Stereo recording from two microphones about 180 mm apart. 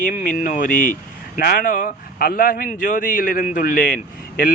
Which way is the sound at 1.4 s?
65° left (ahead or behind).